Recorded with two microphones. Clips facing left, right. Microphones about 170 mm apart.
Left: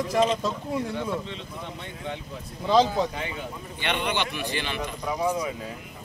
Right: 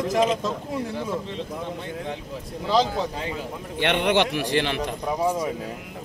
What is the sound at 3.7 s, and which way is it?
A man's voice, 80° right.